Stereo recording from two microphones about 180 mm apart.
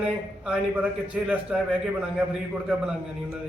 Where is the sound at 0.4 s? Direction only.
5° right (ahead or behind).